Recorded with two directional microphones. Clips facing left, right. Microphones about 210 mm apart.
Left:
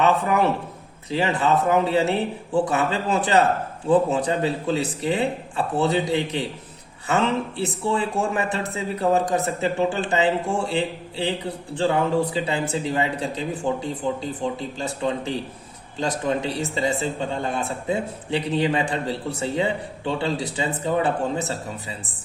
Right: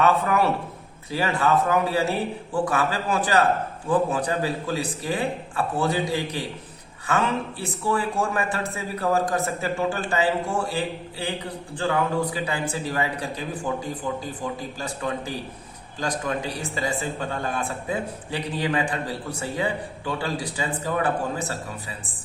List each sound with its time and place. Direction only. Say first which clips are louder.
0.0 s a man's voice: left 1 dB; 20° left (ahead or behind)